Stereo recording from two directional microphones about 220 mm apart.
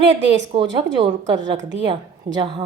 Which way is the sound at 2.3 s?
20° right (ahead or behind).